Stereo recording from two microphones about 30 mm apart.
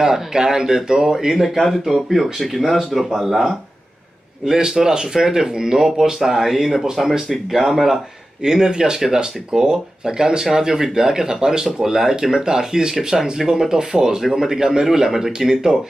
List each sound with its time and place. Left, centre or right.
0.0 s speech: right
1.4 s speech: centre
4.6 s speech: centre
8.4 s speech: centre